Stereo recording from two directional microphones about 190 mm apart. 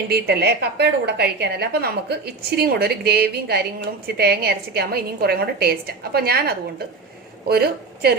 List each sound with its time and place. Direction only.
0.1 s a woman's voice: 60° right (ahead or behind)